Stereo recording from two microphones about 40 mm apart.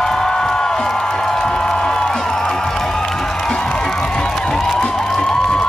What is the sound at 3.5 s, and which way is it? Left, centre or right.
Music, left.